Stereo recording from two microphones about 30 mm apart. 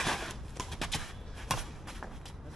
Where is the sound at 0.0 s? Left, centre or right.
Centre.